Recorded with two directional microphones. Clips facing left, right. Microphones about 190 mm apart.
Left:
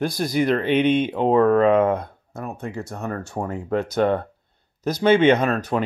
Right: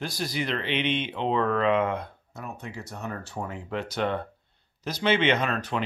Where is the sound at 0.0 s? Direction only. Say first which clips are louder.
Left 9 dB; 50° left (ahead or behind).